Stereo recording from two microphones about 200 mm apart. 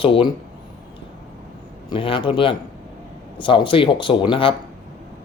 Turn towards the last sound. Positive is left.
turn(degrees=25)  # may be behind; listen again after turning